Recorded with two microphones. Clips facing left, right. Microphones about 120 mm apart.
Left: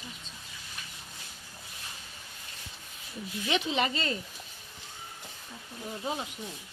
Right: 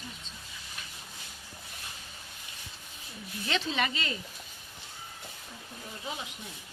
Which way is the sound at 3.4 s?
15° left (ahead or behind).